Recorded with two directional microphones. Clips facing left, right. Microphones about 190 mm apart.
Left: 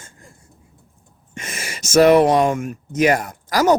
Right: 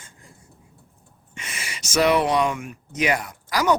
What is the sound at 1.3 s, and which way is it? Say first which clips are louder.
Speech: left 5 dB; 45° left (ahead or behind).